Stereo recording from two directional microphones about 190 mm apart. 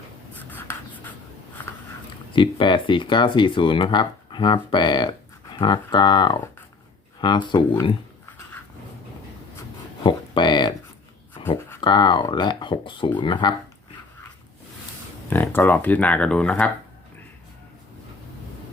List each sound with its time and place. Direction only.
0.3 s writing: 10° left (ahead or behind)
2.3 s speech: 25° left (ahead or behind)
10.0 s speech: 25° left (ahead or behind)
11.8 s speech: 25° left (ahead or behind)
15.3 s speech: 10° left (ahead or behind)